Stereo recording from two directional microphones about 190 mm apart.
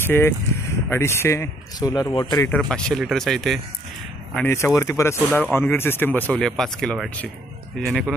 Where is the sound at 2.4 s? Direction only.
5° left (ahead or behind).